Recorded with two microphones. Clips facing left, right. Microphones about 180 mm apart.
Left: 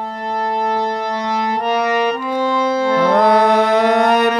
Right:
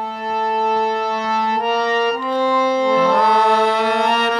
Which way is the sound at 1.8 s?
10° left (ahead or behind).